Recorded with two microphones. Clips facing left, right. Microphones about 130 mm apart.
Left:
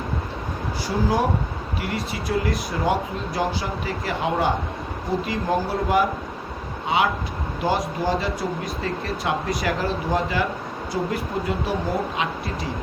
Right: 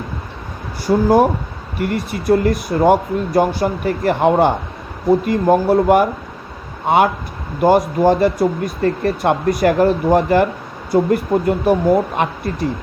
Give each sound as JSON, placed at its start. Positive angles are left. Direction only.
{"t": 0.9, "sound": "speech", "side_deg": -55}